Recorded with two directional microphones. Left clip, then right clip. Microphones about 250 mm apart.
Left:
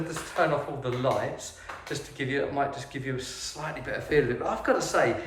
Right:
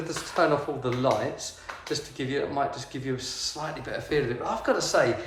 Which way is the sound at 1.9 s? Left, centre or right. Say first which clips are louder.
Left 1 dB; centre.